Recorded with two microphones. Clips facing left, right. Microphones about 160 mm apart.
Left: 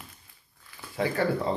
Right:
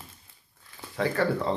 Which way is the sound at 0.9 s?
15° left (ahead or behind).